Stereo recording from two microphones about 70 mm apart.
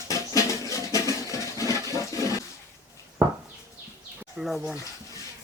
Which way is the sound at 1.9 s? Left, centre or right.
Left.